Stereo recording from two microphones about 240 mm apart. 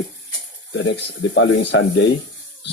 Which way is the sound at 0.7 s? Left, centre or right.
Left.